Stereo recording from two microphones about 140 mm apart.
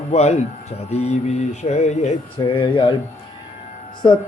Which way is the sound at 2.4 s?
35° left (ahead or behind).